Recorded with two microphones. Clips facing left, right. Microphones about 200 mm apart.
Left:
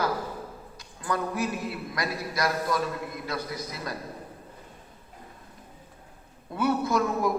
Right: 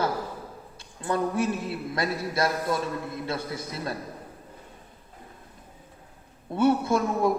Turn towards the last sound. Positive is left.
turn(degrees=-25)  # may be behind; listen again after turning